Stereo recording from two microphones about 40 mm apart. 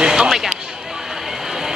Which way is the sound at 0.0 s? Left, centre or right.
Centre.